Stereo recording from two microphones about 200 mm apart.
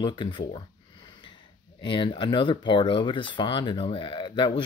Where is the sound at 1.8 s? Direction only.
25° left (ahead or behind).